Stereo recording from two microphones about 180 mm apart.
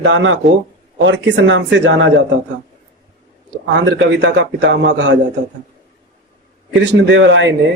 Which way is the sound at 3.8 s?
90° right.